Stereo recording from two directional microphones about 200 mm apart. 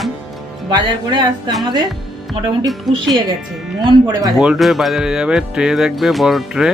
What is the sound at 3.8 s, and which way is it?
Speech, 20° right (ahead or behind).